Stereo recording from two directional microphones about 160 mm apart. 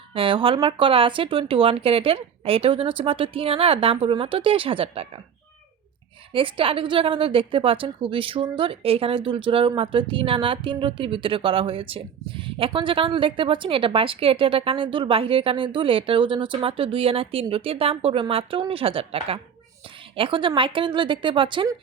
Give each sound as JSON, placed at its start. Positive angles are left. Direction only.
{"t": 0.1, "sound": "a woman's voice", "side_deg": -35}
{"t": 6.3, "sound": "a woman's voice", "side_deg": -35}